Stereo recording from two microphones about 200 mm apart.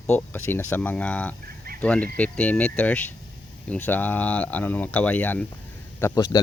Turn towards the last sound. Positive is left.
turn(degrees=15)  # may be behind; listen again after turning